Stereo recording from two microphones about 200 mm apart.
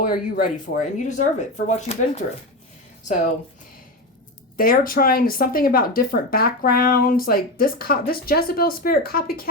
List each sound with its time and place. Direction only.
0.0 s speech: 45° left (ahead or behind)
4.5 s speech: 45° left (ahead or behind)